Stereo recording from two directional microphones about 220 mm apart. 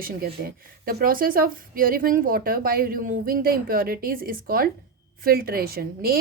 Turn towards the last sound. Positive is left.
turn(degrees=-45)  # may be behind; listen again after turning